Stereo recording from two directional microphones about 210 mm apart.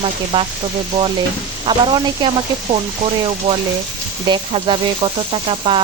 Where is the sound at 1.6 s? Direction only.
20° right (ahead or behind).